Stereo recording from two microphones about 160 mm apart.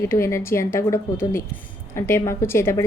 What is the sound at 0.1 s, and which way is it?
Speech, 15° left (ahead or behind).